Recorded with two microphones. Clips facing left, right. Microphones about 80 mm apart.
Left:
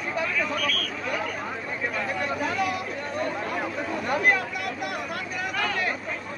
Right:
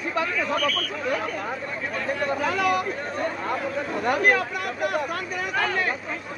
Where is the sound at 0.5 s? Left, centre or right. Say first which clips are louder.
Right 4 dB; right.